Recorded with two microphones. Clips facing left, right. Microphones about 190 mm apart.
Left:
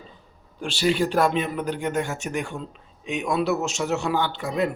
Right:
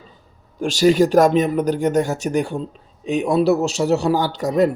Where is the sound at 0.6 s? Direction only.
45° right (ahead or behind).